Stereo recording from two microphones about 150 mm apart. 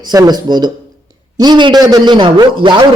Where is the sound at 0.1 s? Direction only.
25° right (ahead or behind).